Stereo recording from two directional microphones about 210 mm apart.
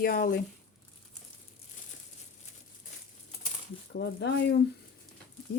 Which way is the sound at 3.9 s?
55° left (ahead or behind).